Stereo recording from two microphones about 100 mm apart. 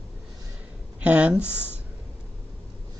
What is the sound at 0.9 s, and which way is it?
Speech, 15° right (ahead or behind).